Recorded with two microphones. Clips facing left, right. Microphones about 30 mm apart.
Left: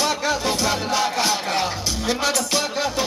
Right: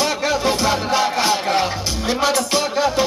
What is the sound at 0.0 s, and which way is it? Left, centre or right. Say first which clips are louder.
Music: right 3 dB; centre.